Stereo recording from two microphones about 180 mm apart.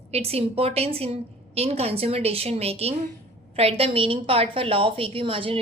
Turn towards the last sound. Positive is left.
turn(degrees=-30)  # may be behind; listen again after turning